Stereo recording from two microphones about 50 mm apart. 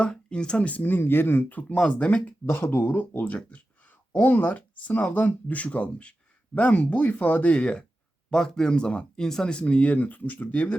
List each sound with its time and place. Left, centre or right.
0.0 s speech: left
0.8 s speech: left
1.5 s speech: left
2.5 s speech: left